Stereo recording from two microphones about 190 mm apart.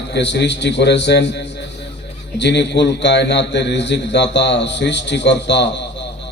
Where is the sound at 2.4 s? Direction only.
65° left (ahead or behind).